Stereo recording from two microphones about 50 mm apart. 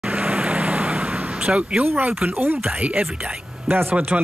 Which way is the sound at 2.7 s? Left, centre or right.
Right.